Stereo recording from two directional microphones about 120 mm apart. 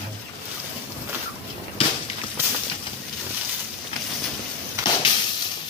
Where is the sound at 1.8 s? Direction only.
50° left (ahead or behind).